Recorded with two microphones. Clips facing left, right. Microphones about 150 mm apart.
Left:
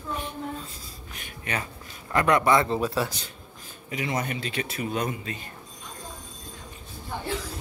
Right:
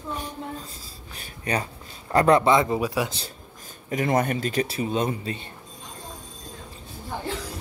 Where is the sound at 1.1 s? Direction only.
35° right (ahead or behind).